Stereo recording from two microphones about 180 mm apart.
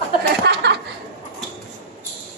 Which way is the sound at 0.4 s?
65° right (ahead or behind).